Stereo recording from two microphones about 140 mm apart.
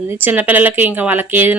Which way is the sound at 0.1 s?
15° right (ahead or behind).